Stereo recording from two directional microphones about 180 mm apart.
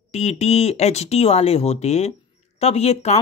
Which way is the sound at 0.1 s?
35° left (ahead or behind).